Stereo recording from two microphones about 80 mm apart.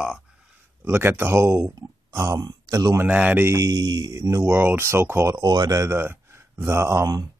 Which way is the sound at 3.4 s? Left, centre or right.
Right.